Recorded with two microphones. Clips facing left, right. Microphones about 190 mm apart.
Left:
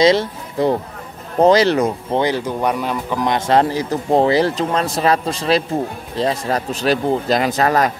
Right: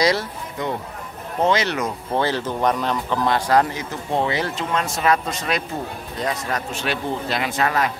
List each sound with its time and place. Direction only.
0.0 s a man's voice: 25° left (ahead or behind)
2.1 s a man's voice: 15° left (ahead or behind); by 7.9 s 40° left (ahead or behind)